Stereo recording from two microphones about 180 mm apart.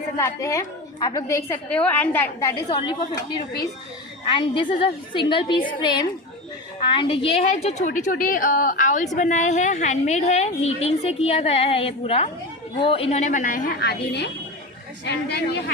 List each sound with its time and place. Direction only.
0.2 s a woman's voice: 15° left (ahead or behind)
4.3 s a woman's voice: 25° left (ahead or behind); by 13.7 s 45° left (ahead or behind)
13.7 s a woman's voice: 65° left (ahead or behind)